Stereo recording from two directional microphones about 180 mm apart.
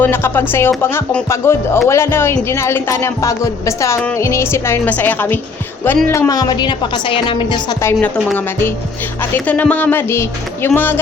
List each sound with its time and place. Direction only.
0.0 s a woman's voice: 10° left (ahead or behind)
9.3 s speech: 10° left (ahead or behind)